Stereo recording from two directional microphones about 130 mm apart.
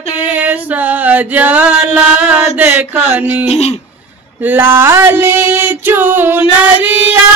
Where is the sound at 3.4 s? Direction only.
55° left (ahead or behind).